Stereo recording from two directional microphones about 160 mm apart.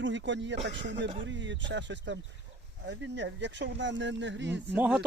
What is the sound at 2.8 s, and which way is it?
Speech, 90° right.